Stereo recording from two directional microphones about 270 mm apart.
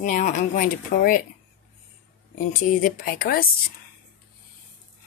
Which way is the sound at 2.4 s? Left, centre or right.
Left.